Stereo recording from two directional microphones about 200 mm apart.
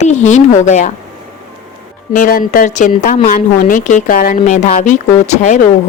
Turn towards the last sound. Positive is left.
turn(degrees=35)  # may be behind; listen again after turning